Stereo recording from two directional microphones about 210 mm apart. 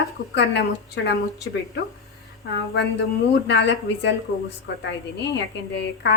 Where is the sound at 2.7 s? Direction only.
55° left (ahead or behind).